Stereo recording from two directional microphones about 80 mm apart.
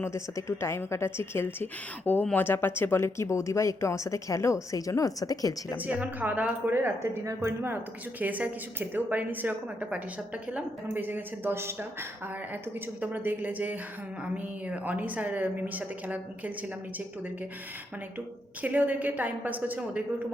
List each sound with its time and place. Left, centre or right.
0.0 s speech: left
5.8 s a woman's voice: centre
8.2 s a woman's voice: right
13.0 s a woman's voice: right
18.6 s a woman's voice: right